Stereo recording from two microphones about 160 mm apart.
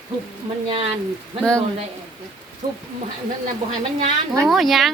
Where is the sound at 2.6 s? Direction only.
35° right (ahead or behind).